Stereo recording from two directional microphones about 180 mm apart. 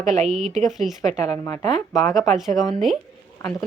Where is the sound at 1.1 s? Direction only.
40° right (ahead or behind).